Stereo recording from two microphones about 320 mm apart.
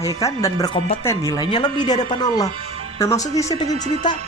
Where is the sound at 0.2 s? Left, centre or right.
Centre.